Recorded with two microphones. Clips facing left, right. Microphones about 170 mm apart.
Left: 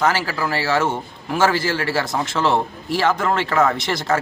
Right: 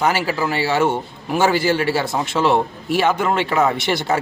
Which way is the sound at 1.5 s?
20° right (ahead or behind).